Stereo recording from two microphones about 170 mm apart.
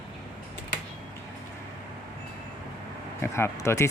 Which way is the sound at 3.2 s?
15° left (ahead or behind).